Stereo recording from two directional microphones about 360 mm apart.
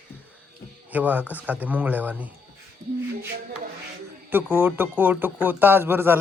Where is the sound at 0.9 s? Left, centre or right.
Centre.